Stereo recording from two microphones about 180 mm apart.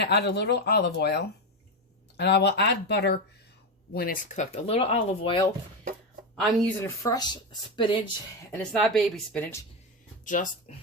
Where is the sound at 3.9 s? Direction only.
55° left (ahead or behind); by 5.5 s 30° left (ahead or behind).